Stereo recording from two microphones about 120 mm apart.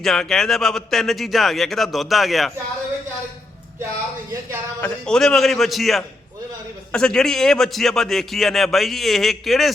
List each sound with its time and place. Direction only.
0.0 s a man's voice: 5° left (ahead or behind)
4.8 s a man's voice: 5° left (ahead or behind)